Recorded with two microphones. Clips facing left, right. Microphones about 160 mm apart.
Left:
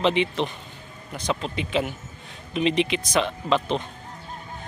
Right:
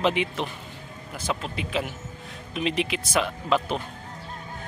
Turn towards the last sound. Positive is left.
turn(degrees=-5)  # may be behind; listen again after turning